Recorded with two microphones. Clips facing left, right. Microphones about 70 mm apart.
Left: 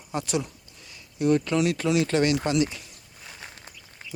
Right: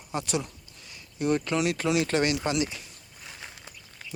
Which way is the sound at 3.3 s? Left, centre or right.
Centre.